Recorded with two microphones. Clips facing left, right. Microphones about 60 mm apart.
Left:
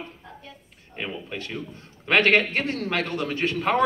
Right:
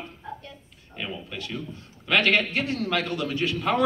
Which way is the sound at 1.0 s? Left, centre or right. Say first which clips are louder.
Left 2 dB; left.